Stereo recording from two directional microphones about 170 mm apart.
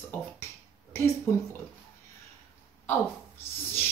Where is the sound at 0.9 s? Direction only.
15° left (ahead or behind).